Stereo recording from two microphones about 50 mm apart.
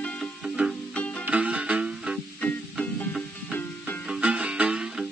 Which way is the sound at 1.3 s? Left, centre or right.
Right.